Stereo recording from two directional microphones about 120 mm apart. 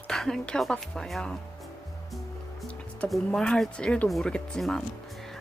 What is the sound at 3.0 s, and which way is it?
Speech, centre (ahead or behind).